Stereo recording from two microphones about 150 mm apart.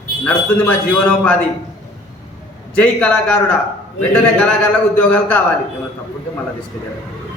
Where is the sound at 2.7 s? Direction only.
5° left (ahead or behind).